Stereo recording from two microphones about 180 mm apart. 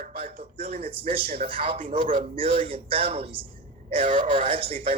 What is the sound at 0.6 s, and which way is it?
A man's voice, 30° right (ahead or behind).